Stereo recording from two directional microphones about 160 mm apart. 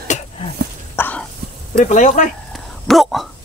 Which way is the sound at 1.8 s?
50° left (ahead or behind).